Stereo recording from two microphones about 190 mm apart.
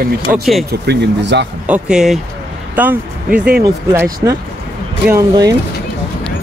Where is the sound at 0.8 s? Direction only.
65° right (ahead or behind).